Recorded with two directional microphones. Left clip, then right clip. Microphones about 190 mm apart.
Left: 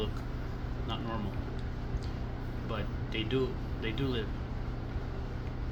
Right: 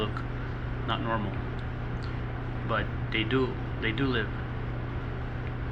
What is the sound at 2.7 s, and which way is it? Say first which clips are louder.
Speech: right 8 dB; 20° left (ahead or behind).